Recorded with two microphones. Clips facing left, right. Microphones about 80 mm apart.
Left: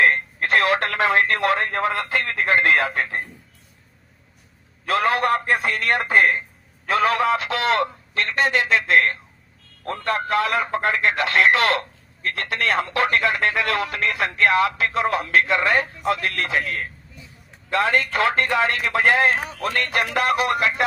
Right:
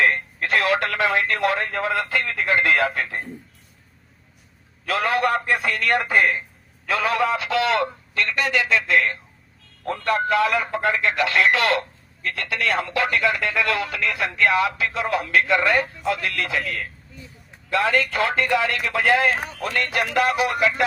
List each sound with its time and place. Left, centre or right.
0.0 s speech: left
5.5 s a man's voice: left
10.5 s speech: left
17.8 s speech: left